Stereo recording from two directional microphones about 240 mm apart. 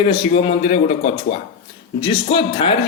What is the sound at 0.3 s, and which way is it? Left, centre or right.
Speech, left.